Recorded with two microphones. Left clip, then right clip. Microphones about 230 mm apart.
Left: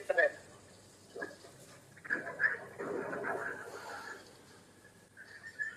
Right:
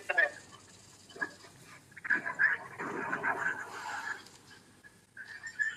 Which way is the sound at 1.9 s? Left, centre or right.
Right.